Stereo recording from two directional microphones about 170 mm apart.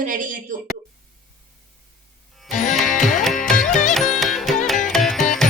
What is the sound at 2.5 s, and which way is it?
Music, 45° left (ahead or behind).